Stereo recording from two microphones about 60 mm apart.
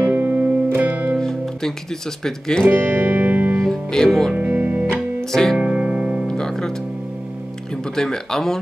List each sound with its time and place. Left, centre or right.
0.0 s music: right
1.1 s music: centre
2.2 s speech: centre
2.6 s music: right
3.5 s music: centre
4.4 s music: right
5.3 s speech: centre
5.6 s music: centre
6.2 s music: centre
7.7 s speech: centre